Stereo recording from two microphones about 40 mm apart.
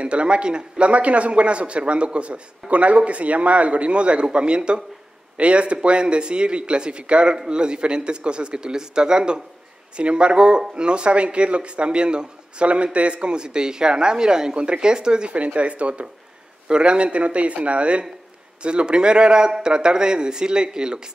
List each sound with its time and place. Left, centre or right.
0.0 s a man's voice: right
15.3 s a man's voice: right